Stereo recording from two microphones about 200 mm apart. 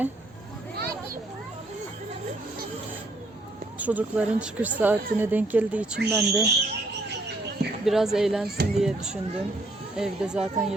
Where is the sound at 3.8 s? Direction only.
5° right (ahead or behind).